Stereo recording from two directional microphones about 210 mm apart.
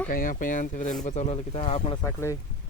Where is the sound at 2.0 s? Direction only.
10° left (ahead or behind).